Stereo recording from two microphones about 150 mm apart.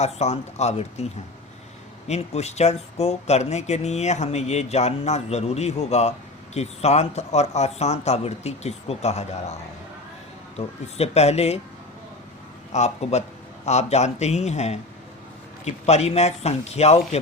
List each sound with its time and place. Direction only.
0.0 s speech: 45° left (ahead or behind)
2.0 s speech: 45° left (ahead or behind)
10.6 s speech: 45° left (ahead or behind)
12.7 s speech: 45° left (ahead or behind)